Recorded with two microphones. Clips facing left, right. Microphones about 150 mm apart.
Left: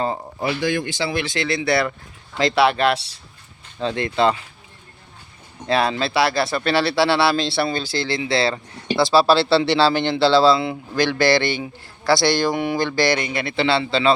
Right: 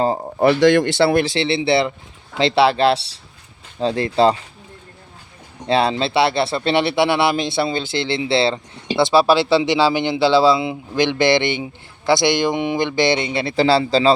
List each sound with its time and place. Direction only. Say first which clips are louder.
0.0 s speech: right 5 dB; 35° right (ahead or behind)
0.3 s speech: right 11 dB; 55° right (ahead or behind)
1.2 s speech: right 4 dB; 30° right (ahead or behind)
5.6 s speech: right 2 dB; 30° right (ahead or behind)